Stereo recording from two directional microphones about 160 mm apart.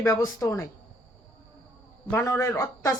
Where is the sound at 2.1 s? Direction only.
20° left (ahead or behind).